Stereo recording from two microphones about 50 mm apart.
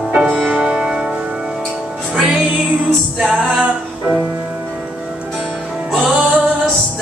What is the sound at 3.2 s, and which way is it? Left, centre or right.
Music, centre.